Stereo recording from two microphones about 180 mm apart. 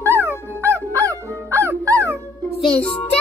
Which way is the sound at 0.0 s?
15° right (ahead or behind).